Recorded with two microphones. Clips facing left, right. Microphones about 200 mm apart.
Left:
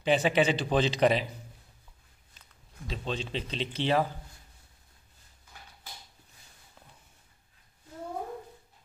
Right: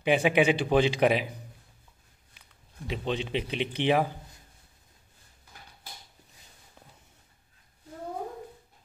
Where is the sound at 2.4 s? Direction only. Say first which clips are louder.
Left 1 dB; 15° right (ahead or behind).